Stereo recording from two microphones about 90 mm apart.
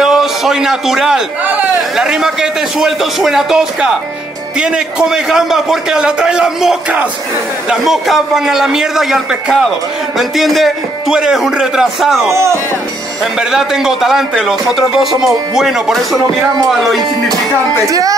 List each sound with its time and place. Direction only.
0.0 s a man's voice: 5° right (ahead or behind)
1.4 s a sound: 20° right (ahead or behind)
1.8 s a man's voice: 5° right (ahead or behind)
12.3 s speech: 30° right (ahead or behind)
13.2 s a man's voice: 5° right (ahead or behind)
17.8 s speech: 40° right (ahead or behind)